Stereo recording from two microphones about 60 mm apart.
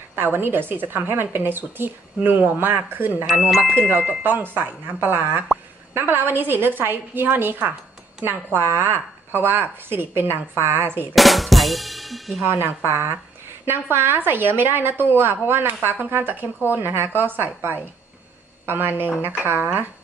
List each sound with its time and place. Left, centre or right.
0.1 s a woman's voice: right
3.3 s speech: centre
3.8 s chime: right
4.2 s a woman's voice: right
11.1 s drum: centre
12.4 s a woman's voice: right